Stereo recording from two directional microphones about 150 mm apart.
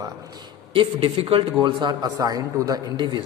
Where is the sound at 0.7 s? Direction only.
35° right (ahead or behind).